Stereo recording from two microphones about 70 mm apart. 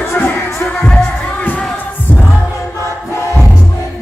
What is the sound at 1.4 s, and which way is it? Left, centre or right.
Music, centre.